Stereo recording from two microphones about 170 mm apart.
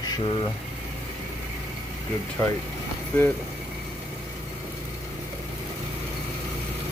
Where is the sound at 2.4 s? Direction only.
15° left (ahead or behind).